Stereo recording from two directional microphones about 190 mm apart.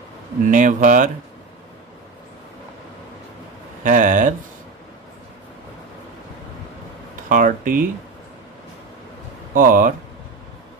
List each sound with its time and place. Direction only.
0.5 s speech: 40° right (ahead or behind)
3.8 s speech: 45° right (ahead or behind)
7.2 s a sound: 45° right (ahead or behind)
9.5 s speech: 45° right (ahead or behind)